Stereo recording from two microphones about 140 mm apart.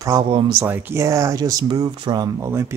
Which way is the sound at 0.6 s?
15° right (ahead or behind).